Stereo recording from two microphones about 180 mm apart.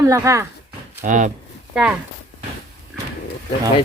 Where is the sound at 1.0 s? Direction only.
45° right (ahead or behind).